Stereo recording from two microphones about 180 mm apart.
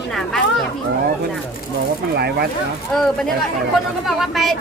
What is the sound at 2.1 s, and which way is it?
Speech, 65° right (ahead or behind).